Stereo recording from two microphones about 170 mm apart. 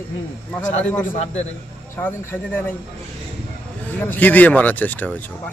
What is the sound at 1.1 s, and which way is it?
Speech, 40° left (ahead or behind).